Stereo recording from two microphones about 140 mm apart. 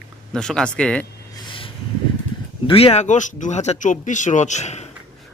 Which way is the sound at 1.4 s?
35° left (ahead or behind).